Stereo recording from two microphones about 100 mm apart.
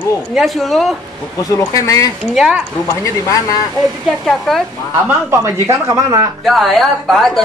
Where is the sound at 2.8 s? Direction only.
35° left (ahead or behind).